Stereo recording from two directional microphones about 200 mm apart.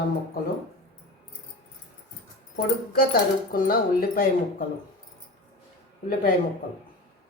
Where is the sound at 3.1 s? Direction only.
45° left (ahead or behind).